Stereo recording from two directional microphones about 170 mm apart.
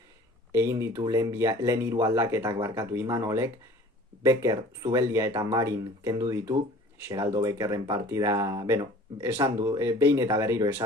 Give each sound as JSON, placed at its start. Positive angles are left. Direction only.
{"t": 0.5, "sound": "speech", "side_deg": -20}